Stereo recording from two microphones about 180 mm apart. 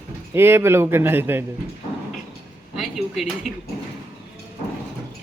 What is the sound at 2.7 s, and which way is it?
Speech, centre (ahead or behind).